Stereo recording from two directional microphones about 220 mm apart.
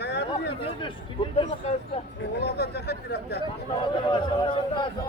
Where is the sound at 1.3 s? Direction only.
25° left (ahead or behind).